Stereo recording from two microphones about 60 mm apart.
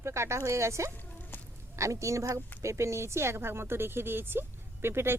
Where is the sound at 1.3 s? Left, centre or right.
Left.